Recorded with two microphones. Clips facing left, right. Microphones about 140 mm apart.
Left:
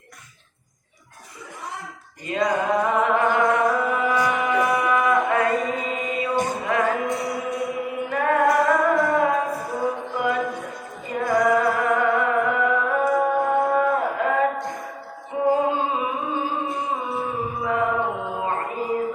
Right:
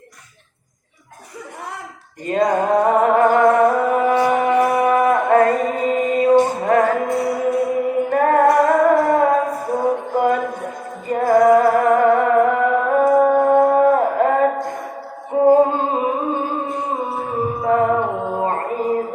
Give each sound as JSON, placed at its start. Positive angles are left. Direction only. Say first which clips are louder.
{"t": 2.2, "sound": "music", "louder": "right 5 dB", "side_deg": -45}
{"t": 13.5, "sound": "a sound", "louder": "right 7 dB", "side_deg": -40}
{"t": 15.3, "sound": "music", "louder": "right 8 dB", "side_deg": -45}